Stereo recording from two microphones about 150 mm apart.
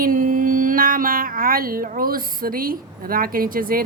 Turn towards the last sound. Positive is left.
turn(degrees=-70)  # may be behind; listen again after turning